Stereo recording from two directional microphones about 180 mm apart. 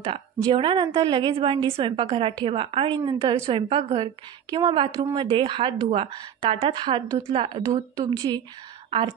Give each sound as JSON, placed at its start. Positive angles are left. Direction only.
{"t": 0.0, "sound": "a woman's voice", "side_deg": -30}